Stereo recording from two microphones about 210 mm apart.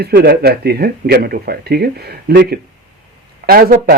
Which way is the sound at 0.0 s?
50° right (ahead or behind).